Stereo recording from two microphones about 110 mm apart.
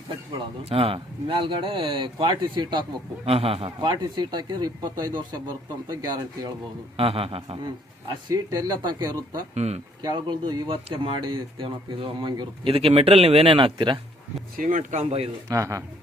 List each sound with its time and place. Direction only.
0.6 s speech: 60° right (ahead or behind); by 2.8 s 40° right (ahead or behind)
3.2 s speech: 60° right (ahead or behind)
3.8 s speech: 40° right (ahead or behind)
6.9 s speech: 60° right (ahead or behind)
7.6 s speech: 35° right (ahead or behind)
9.6 s speech: 90° right
10.0 s speech: 40° right (ahead or behind)
14.8 s speech: 80° right
15.4 s speech: 30° right (ahead or behind)